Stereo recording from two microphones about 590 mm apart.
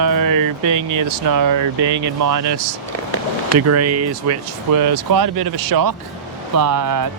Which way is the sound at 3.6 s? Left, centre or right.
Right.